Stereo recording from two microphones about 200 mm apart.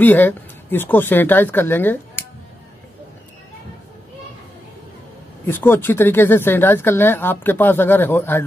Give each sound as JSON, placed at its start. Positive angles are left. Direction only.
{"t": 0.0, "sound": "speech", "side_deg": 10}
{"t": 5.4, "sound": "speech", "side_deg": 10}